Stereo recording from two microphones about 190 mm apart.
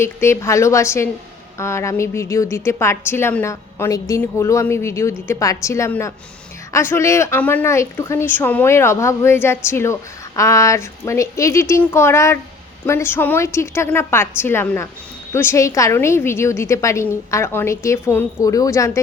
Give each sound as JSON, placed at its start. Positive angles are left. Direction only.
{"t": 0.0, "sound": "a woman's voice", "side_deg": 15}